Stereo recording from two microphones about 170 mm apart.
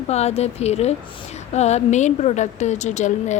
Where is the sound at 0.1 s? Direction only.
40° left (ahead or behind).